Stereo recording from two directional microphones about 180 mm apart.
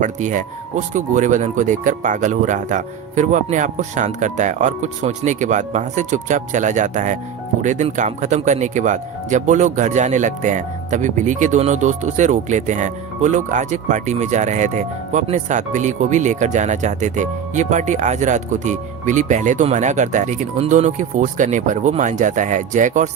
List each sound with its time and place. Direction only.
0.0 s speech: 45° right (ahead or behind)